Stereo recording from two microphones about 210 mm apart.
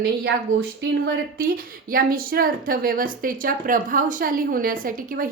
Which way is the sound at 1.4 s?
45° right (ahead or behind).